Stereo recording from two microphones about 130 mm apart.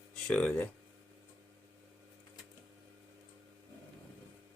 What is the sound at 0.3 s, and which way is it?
Speech, 5° left (ahead or behind).